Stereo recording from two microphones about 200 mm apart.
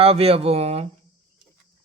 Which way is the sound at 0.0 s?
30° right (ahead or behind).